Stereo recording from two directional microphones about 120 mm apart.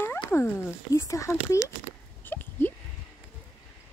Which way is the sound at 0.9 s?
25° left (ahead or behind).